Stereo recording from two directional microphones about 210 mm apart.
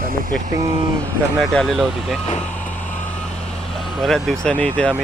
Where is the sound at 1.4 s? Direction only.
Centre (ahead or behind).